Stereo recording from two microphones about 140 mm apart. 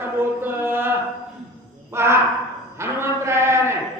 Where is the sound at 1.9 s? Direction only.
20° right (ahead or behind).